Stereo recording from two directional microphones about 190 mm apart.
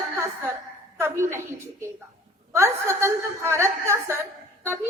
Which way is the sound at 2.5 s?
15° right (ahead or behind).